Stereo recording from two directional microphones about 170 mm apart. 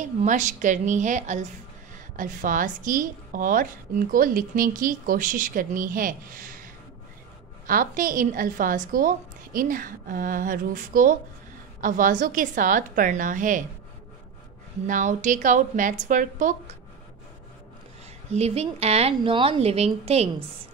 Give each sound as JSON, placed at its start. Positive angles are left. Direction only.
{"t": 0.2, "sound": "a woman's voice", "side_deg": -50}
{"t": 14.9, "sound": "a woman's voice", "side_deg": -50}
{"t": 18.3, "sound": "a woman's voice", "side_deg": -40}